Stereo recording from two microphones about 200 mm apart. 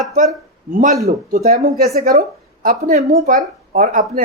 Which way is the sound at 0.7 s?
40° right (ahead or behind).